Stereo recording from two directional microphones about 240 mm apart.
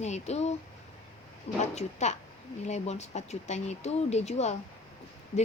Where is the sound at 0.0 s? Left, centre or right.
Left.